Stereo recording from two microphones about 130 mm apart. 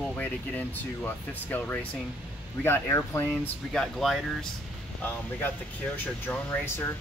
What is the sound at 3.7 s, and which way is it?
Speech, centre (ahead or behind).